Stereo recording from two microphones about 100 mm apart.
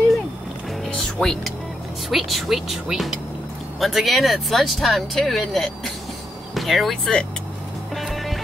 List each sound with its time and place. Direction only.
0.9 s music: 5° left (ahead or behind)
2.0 s speech: centre (ahead or behind)
7.9 s music: centre (ahead or behind)